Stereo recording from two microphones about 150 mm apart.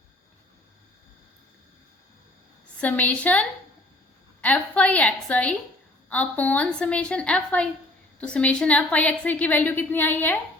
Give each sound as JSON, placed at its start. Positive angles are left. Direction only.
{"t": 2.8, "sound": "a woman's voice", "side_deg": 10}